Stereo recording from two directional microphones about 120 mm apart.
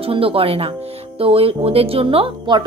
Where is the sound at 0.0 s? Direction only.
50° right (ahead or behind).